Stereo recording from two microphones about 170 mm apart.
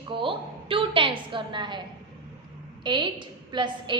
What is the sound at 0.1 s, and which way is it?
A woman's voice, 30° right (ahead or behind).